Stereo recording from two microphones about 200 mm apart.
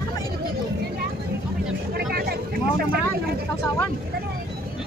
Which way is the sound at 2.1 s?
50° right (ahead or behind).